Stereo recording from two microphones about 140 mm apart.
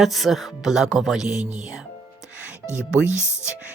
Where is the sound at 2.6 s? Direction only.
20° left (ahead or behind).